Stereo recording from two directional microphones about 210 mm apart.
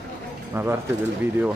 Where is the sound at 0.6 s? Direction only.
10° right (ahead or behind).